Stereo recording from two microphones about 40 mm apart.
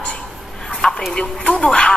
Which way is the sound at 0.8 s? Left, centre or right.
Centre.